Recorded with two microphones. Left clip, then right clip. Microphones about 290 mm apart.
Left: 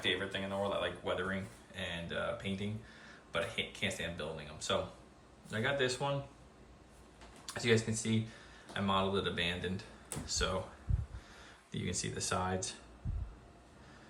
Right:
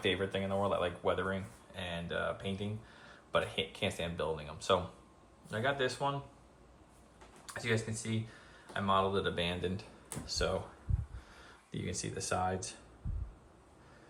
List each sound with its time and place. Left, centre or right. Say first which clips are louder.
0.0 s a man's voice: right 2 dB; centre
7.4 s speech: left 4 dB; centre